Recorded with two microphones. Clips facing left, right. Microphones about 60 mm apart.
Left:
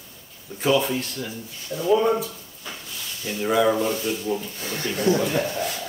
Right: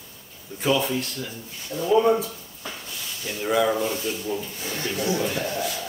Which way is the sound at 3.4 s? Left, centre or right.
Centre.